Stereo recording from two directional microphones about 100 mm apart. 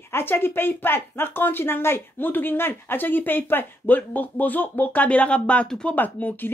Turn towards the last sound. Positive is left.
turn(degrees=20)  # may be behind; listen again after turning